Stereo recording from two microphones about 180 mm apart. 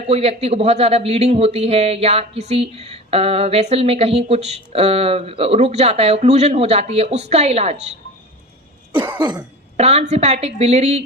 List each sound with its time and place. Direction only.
0.1 s a man's voice: 35° right (ahead or behind)
9.1 s cough: 25° right (ahead or behind)
9.7 s a man's voice: 35° right (ahead or behind)